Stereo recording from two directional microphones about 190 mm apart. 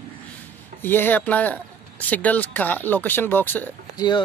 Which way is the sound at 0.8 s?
10° left (ahead or behind).